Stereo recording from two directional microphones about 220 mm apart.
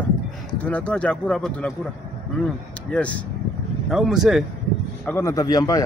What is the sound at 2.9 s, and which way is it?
A man's voice, 5° left (ahead or behind).